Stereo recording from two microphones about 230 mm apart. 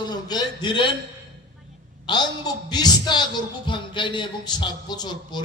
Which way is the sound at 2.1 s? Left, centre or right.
Centre.